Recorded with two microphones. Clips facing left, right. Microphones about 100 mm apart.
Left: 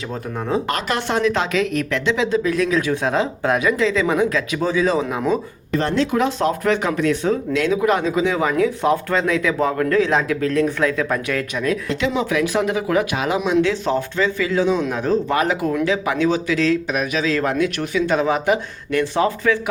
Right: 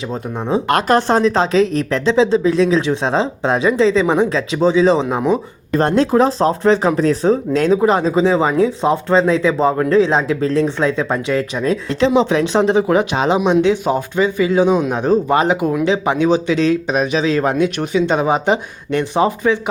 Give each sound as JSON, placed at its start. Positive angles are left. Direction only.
{"t": 0.1, "sound": "speech", "side_deg": -20}
{"t": 0.7, "sound": "speech", "side_deg": -45}
{"t": 5.7, "sound": "speech", "side_deg": -45}